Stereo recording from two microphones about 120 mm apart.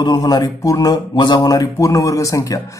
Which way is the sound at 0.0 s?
35° left (ahead or behind).